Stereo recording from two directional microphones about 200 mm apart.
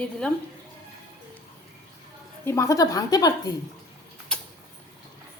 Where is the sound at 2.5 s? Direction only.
15° left (ahead or behind).